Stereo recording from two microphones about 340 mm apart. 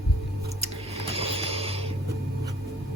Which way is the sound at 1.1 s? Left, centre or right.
Centre.